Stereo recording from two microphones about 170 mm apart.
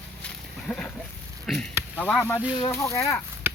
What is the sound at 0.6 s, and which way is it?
Speech, 5° left (ahead or behind).